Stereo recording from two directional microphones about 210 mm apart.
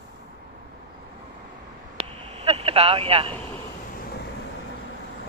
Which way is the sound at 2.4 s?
30° right (ahead or behind).